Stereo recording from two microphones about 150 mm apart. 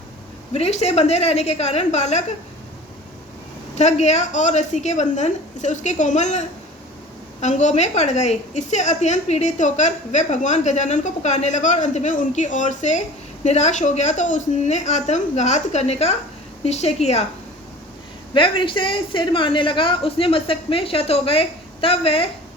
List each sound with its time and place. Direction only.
0.5 s a woman's voice: 45° left (ahead or behind)
3.8 s a woman's voice: 50° left (ahead or behind)
7.4 s a woman's voice: 50° left (ahead or behind)
18.3 s a woman's voice: 35° left (ahead or behind)